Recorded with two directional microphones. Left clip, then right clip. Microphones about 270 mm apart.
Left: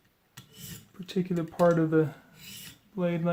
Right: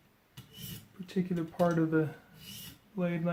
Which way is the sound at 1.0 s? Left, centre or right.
Left.